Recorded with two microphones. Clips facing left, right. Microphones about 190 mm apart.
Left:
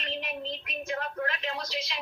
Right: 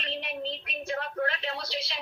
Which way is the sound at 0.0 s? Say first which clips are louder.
Right 1 dB; 35° right (ahead or behind).